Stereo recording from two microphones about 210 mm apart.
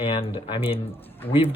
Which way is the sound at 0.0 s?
25° left (ahead or behind).